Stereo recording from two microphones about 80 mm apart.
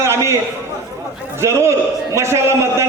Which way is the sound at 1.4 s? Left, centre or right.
Right.